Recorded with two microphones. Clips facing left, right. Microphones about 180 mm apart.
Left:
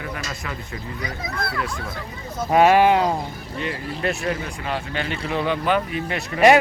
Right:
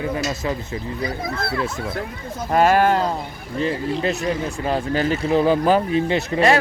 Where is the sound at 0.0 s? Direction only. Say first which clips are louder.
Right 8 dB; 25° right (ahead or behind).